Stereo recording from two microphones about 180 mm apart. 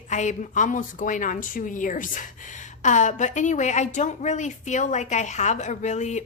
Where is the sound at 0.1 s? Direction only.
40° left (ahead or behind).